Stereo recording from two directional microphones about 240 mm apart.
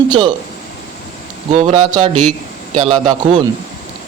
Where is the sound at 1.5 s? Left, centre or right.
Right.